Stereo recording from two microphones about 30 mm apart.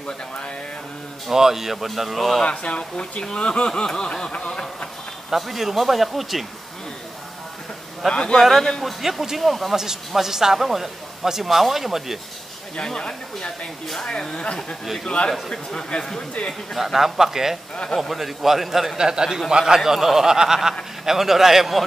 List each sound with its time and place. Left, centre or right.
1.3 s speech: centre
2.5 s speech: left
3.9 s a sound: left
5.3 s speech: centre
8.1 s speech: left
8.4 s a man's voice: centre
9.0 s speech: centre
9.4 s speech: centre
10.1 s speech: centre
14.0 s a sound: left
14.4 s speech: left
15.5 s a sound: left
16.7 s speech: centre
18.9 s a man's voice: right